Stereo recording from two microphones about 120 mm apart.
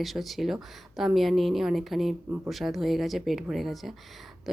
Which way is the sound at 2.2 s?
15° right (ahead or behind).